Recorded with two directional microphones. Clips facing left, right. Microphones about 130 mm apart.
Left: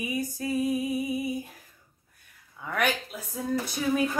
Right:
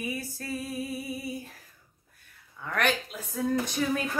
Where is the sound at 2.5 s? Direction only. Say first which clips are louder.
Even; 10° left (ahead or behind).